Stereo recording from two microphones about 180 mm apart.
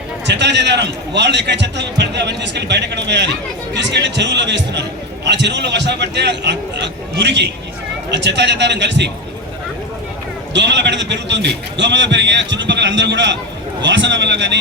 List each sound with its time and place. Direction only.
0.3 s a man's voice: 75° right (ahead or behind)
10.5 s a man's voice: 75° right (ahead or behind)